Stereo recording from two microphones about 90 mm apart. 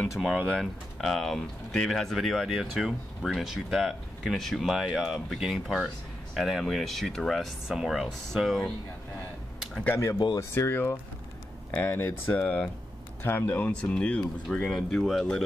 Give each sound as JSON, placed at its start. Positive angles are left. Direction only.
{"t": 0.2, "sound": "speech", "side_deg": -5}
{"t": 10.5, "sound": "speech", "side_deg": 25}
{"t": 13.7, "sound": "speech", "side_deg": 10}